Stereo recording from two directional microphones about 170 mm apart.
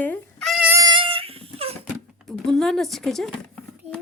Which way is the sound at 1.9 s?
Centre (ahead or behind).